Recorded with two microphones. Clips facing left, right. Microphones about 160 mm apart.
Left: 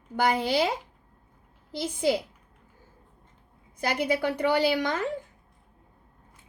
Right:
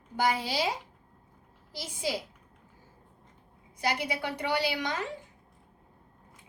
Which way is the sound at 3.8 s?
50° left (ahead or behind).